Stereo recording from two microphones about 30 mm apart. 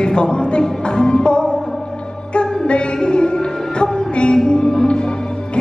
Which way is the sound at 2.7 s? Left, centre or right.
Left.